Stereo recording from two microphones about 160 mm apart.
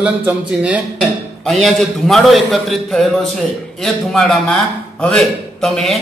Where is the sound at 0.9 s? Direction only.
Centre (ahead or behind).